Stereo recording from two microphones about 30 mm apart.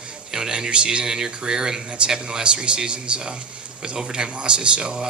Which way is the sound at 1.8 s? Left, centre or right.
Right.